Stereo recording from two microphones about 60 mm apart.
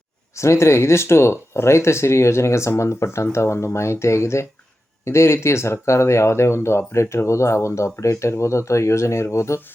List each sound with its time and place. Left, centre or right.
0.3 s speech: left